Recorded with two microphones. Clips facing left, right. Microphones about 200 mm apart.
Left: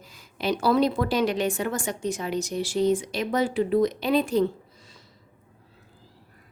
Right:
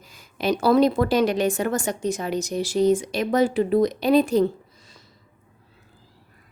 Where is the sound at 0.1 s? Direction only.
45° right (ahead or behind).